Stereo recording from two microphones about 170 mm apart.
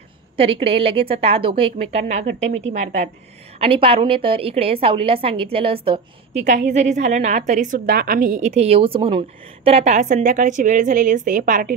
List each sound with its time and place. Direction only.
0.4 s a woman's voice: 35° right (ahead or behind)
3.5 s a woman's voice: 35° right (ahead or behind)
6.4 s a woman's voice: 45° right (ahead or behind)